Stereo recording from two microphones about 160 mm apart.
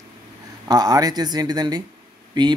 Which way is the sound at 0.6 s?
25° right (ahead or behind).